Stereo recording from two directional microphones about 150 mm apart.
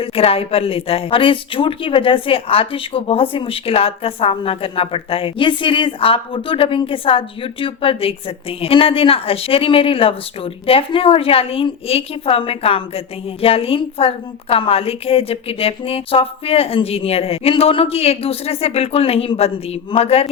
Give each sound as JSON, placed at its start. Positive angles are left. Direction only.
{"t": 0.0, "sound": "a woman's voice", "side_deg": 40}